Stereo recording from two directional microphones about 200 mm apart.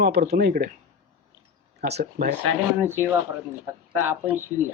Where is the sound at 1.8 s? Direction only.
55° right (ahead or behind).